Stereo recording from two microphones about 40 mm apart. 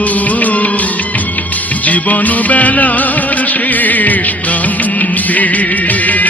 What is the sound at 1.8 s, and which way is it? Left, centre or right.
Music, left.